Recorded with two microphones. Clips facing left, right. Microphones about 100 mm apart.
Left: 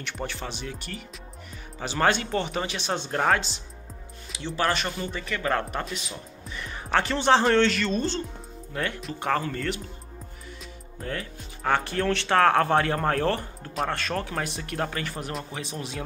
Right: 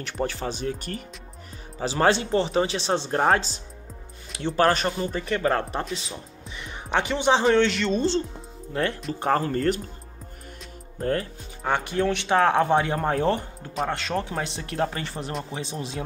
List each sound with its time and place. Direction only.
0.0 s speech: 35° right (ahead or behind)
1.8 s speech: 30° right (ahead or behind)
4.3 s speech: 50° right (ahead or behind)
11.0 s speech: 40° right (ahead or behind)
11.6 s speech: 15° right (ahead or behind)